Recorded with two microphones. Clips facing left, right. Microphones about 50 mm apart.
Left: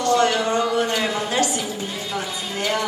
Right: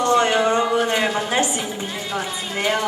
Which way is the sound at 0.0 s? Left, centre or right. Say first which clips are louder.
Right 2 dB; right.